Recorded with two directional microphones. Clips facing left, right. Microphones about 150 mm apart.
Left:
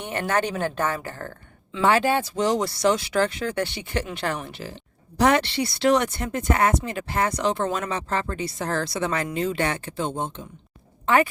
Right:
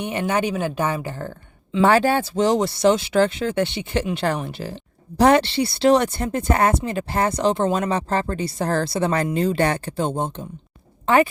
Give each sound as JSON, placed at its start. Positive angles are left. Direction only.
{"t": 0.0, "sound": "speech", "side_deg": -15}
{"t": 1.8, "sound": "speech", "side_deg": -35}
{"t": 11.0, "sound": "speech", "side_deg": -30}